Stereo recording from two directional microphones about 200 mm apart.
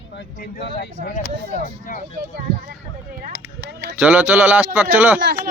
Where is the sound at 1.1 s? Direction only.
40° left (ahead or behind).